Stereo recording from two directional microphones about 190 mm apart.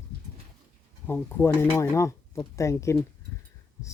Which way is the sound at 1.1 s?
10° left (ahead or behind).